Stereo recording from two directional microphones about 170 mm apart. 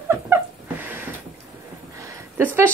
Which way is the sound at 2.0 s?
15° right (ahead or behind).